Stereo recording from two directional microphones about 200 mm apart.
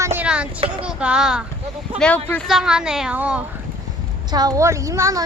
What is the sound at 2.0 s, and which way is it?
Speech, 5° left (ahead or behind).